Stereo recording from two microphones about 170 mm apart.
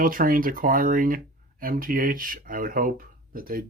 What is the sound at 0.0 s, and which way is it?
Speech, 55° right (ahead or behind).